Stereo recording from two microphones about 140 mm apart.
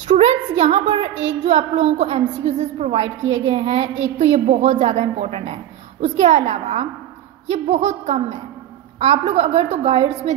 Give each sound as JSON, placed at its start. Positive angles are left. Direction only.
{"t": 0.1, "sound": "a woman's voice", "side_deg": -50}